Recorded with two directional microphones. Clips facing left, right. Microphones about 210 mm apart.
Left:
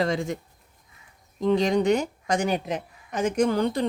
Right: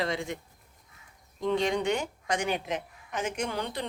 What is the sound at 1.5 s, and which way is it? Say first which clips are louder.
A woman's voice: left 6 dB; 40° left (ahead or behind).